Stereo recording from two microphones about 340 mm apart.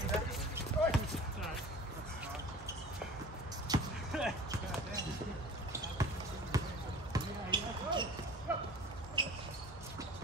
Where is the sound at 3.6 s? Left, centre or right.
Centre.